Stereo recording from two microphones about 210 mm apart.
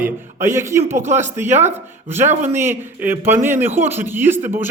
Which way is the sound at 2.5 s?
10° right (ahead or behind).